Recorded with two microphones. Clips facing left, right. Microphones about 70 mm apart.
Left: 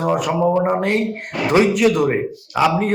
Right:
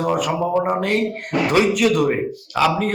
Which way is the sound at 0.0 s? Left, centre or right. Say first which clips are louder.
Left 2 dB; left.